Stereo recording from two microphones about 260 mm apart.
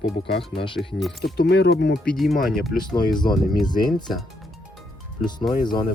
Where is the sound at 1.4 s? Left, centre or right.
Left.